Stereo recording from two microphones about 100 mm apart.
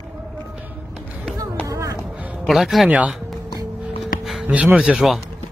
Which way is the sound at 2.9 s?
15° right (ahead or behind).